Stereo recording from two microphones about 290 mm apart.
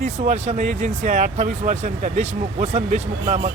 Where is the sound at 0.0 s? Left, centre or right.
Right.